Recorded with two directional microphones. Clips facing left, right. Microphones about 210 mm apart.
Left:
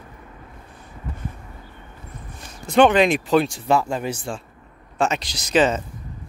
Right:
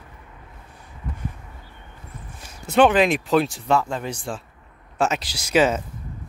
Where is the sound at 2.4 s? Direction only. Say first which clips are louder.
Left 1 dB; 5° right (ahead or behind).